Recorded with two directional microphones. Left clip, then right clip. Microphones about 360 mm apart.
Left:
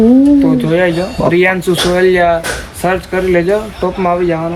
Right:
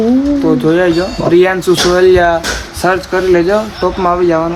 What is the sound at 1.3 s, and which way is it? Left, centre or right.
Speech, centre.